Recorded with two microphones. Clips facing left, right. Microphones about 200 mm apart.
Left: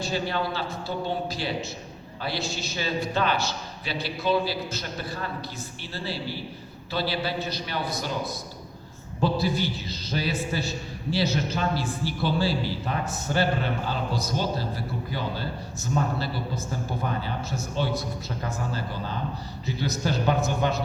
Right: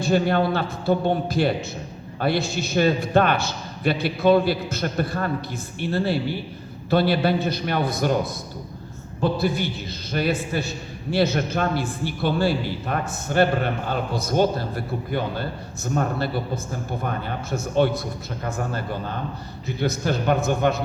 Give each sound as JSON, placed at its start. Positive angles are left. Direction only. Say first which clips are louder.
{"t": 0.0, "sound": "a man's voice", "louder": "right 8 dB", "side_deg": -55}
{"t": 9.4, "sound": "a man's voice", "louder": "right 3 dB", "side_deg": -55}